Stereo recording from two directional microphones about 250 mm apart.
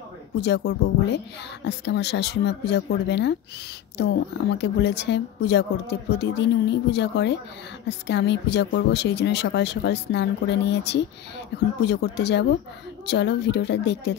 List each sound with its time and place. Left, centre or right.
0.4 s speech: left